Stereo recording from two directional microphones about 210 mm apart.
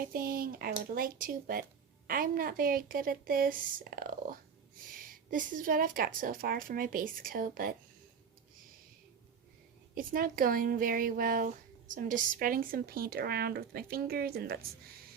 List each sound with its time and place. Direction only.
0.0 s a woman's voice: 45° right (ahead or behind)
9.9 s speech: 40° right (ahead or behind)